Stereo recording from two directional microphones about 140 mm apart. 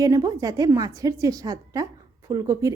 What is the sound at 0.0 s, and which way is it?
A woman's voice, 25° right (ahead or behind).